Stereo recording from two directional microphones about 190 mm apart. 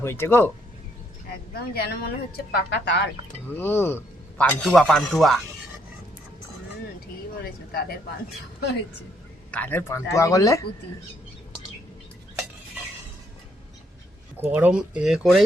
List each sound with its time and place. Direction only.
0.0 s speech: 10° left (ahead or behind)
1.7 s a woman's voice: 55° left (ahead or behind)
3.6 s speech: 10° left (ahead or behind)
9.5 s speech: 10° left (ahead or behind)
14.4 s speech: 10° right (ahead or behind)